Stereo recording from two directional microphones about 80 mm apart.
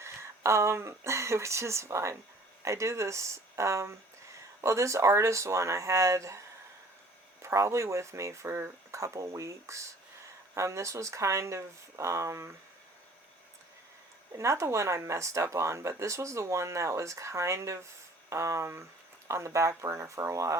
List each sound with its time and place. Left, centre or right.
0.0 s speech: right
7.4 s speech: right
14.3 s speech: right